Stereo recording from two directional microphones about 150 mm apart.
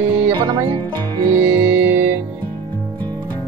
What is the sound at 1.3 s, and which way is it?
Speech, 10° right (ahead or behind).